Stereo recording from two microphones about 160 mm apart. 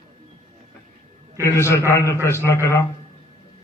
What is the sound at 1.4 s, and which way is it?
A man's voice, 15° left (ahead or behind).